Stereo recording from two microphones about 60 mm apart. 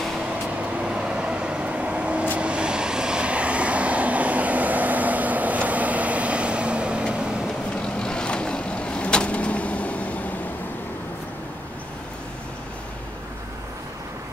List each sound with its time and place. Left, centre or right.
0.7 s vehicle: centre
7.7 s vehicle: centre